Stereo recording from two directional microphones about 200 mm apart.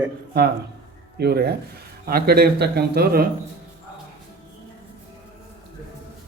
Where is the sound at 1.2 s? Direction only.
55° right (ahead or behind).